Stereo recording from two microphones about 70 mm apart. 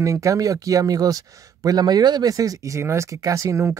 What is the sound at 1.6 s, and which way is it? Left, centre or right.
Speech, right.